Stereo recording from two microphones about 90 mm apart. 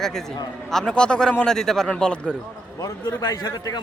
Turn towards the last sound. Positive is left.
turn(degrees=45)  # may be behind; listen again after turning